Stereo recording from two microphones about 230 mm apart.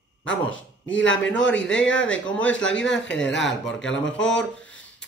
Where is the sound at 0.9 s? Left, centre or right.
Left.